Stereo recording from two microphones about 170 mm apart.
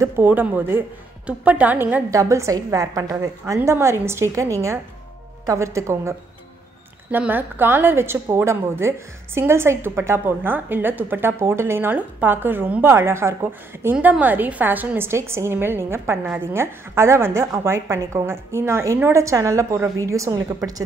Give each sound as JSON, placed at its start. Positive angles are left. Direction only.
{"t": 0.0, "sound": "a woman's voice", "side_deg": -10}